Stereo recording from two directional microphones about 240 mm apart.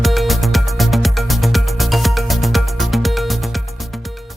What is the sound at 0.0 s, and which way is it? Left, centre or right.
Music, centre.